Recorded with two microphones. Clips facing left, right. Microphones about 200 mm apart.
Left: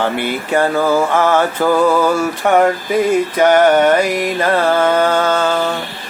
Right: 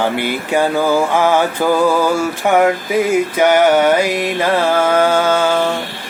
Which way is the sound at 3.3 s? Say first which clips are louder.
Left 1 dB; 10° right (ahead or behind).